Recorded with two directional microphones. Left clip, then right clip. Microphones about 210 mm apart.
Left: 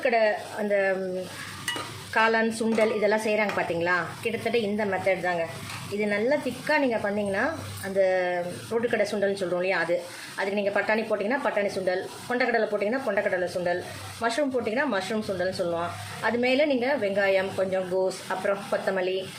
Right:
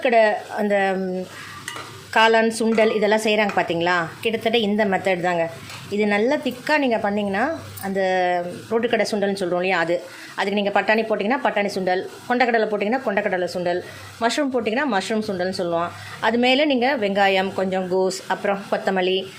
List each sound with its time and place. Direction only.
0.0 s speech: 50° right (ahead or behind)
2.1 s speech: 40° right (ahead or behind)